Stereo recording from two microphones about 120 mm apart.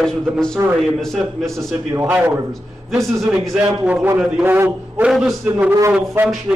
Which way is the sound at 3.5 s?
5° right (ahead or behind).